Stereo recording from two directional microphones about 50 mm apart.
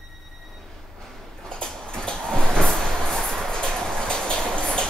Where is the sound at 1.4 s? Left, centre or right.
Centre.